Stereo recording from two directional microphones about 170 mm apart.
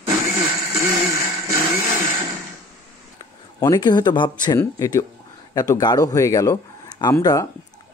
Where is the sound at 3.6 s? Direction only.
25° left (ahead or behind).